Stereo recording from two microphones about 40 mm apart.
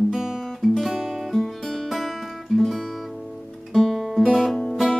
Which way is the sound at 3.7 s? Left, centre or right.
Centre.